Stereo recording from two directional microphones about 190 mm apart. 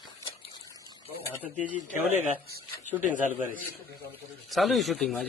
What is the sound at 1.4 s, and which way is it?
Speech, 10° right (ahead or behind).